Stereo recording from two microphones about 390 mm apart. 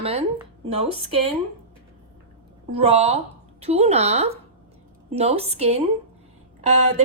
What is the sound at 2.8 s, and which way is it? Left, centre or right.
A woman's voice, centre.